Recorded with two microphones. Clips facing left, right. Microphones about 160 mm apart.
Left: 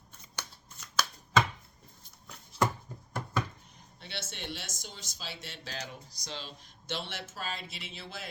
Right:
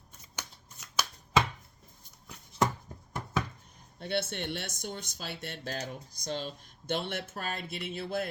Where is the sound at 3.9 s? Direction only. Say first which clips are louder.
Right 11 dB; 50° right (ahead or behind).